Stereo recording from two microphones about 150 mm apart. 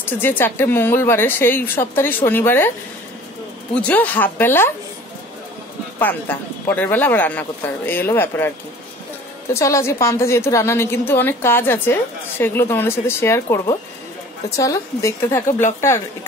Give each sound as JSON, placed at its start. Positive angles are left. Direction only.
{"t": 0.0, "sound": "a woman's voice", "side_deg": 15}
{"t": 3.7, "sound": "a woman's voice", "side_deg": 10}
{"t": 5.9, "sound": "a woman's voice", "side_deg": 10}